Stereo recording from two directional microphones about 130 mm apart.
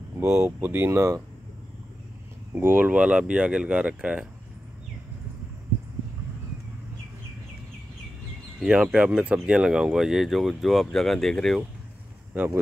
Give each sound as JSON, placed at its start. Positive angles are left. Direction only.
{"t": 0.2, "sound": "speech", "side_deg": -20}
{"t": 2.5, "sound": "speech", "side_deg": -15}
{"t": 8.5, "sound": "speech", "side_deg": 0}
{"t": 12.3, "sound": "speech", "side_deg": -10}